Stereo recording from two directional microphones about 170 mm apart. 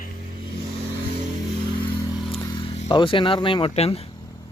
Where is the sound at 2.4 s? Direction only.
25° left (ahead or behind).